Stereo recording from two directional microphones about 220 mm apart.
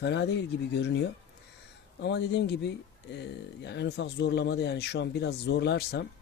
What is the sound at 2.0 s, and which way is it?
Speech, 50° left (ahead or behind).